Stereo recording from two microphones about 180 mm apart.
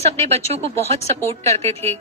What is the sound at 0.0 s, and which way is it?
Speech, 35° right (ahead or behind).